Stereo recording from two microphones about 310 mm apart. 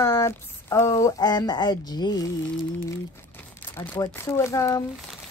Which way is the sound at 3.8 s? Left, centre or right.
Centre.